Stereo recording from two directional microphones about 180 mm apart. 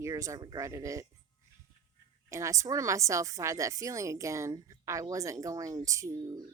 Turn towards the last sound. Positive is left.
turn(degrees=-15)  # may be behind; listen again after turning